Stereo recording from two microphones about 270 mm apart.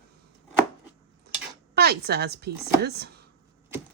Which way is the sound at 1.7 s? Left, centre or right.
Right.